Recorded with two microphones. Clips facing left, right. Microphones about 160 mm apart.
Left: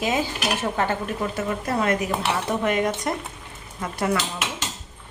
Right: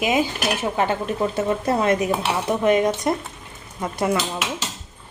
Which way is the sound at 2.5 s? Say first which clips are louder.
Right 6 dB; 20° right (ahead or behind).